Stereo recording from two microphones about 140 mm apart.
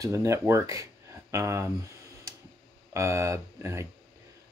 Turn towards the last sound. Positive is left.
turn(degrees=-20)  # may be behind; listen again after turning